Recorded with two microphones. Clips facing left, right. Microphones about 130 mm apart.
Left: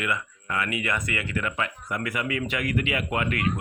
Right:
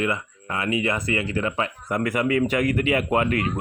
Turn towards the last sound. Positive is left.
turn(degrees=-35)  # may be behind; listen again after turning